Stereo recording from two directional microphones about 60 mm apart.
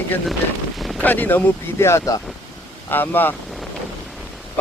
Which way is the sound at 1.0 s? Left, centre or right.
Left.